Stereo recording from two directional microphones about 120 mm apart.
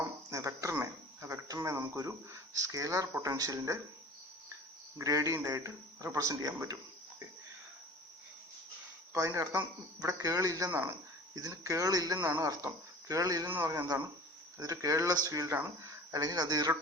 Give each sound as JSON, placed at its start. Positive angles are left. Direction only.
{"t": 0.3, "sound": "speech", "side_deg": -25}
{"t": 4.9, "sound": "speech", "side_deg": -30}
{"t": 9.1, "sound": "speech", "side_deg": -30}
{"t": 13.5, "sound": "speech", "side_deg": -20}